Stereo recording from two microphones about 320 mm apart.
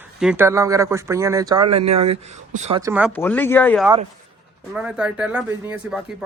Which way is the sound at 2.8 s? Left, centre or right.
Centre.